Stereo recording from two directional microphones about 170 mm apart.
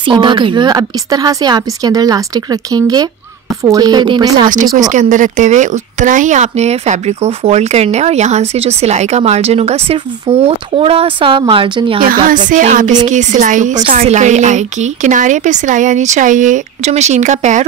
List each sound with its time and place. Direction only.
0.0 s a woman's voice: 30° right (ahead or behind)
4.7 s speech: 45° right (ahead or behind); by 12.0 s 30° right (ahead or behind)
12.0 s a woman's voice: 55° right (ahead or behind)